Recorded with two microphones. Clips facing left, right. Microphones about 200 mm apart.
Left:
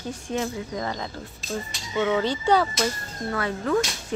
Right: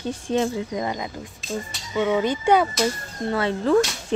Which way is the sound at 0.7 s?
15° right (ahead or behind).